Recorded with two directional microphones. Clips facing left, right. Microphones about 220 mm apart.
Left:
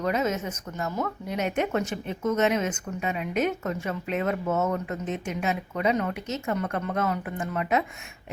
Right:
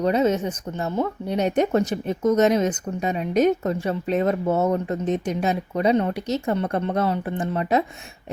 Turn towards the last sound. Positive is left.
turn(degrees=-35)  # may be behind; listen again after turning